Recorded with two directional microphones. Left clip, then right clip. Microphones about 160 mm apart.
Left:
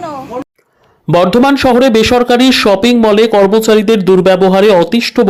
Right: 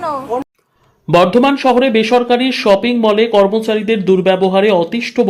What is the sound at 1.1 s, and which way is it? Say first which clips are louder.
Speech: left 2 dB; 30° left (ahead or behind).